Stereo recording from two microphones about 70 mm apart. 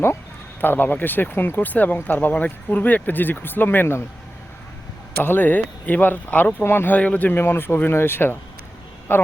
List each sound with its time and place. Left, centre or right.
0.6 s speech: left
5.2 s speech: left